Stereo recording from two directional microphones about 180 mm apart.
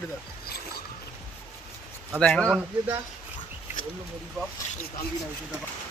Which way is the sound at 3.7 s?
10° right (ahead or behind).